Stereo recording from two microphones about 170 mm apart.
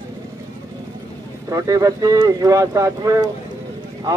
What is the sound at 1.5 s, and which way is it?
Speech, 20° right (ahead or behind).